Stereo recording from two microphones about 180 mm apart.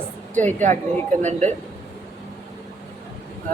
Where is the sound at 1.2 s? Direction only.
40° right (ahead or behind).